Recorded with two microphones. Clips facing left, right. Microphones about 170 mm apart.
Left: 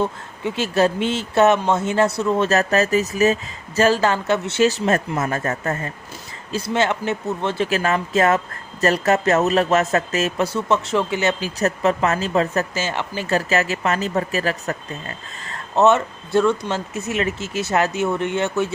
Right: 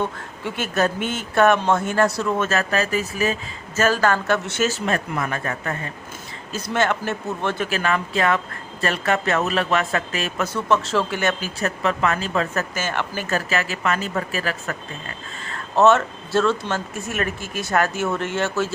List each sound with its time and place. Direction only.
0.0 s speech: 25° left (ahead or behind)
2.4 s speech: 40° left (ahead or behind)
3.8 s speech: 30° left (ahead or behind)
6.5 s speech: 25° left (ahead or behind)
7.7 s speech: 35° left (ahead or behind)
10.7 s speech: 20° left (ahead or behind)
11.6 s speech: 35° left (ahead or behind)
12.9 s speech: 20° left (ahead or behind)
13.2 s speech: 35° left (ahead or behind)
15.7 s speech: 15° left (ahead or behind)